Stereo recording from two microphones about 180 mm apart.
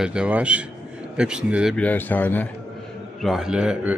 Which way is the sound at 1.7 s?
10° left (ahead or behind).